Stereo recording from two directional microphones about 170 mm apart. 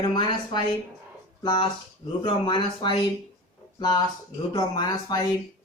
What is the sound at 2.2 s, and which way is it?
Speech, 30° left (ahead or behind).